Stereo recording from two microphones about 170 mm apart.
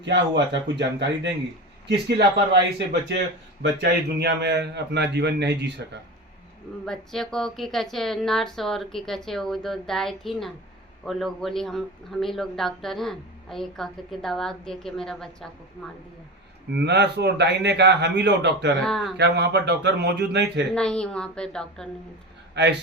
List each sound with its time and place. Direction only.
0.0 s a man's voice: 90° right
6.8 s speech: centre (ahead or behind)
16.8 s a man's voice: 90° right
18.8 s speech: centre (ahead or behind)
19.1 s a man's voice: 80° right
20.7 s speech: 5° left (ahead or behind)
22.6 s a man's voice: 85° right